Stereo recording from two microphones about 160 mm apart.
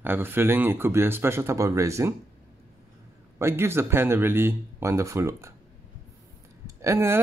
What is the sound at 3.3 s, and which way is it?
Speech, 15° right (ahead or behind).